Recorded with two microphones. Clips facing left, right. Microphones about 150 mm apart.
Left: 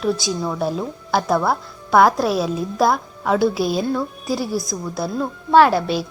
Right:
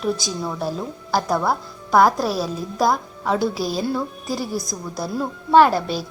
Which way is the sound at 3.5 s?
40° right (ahead or behind).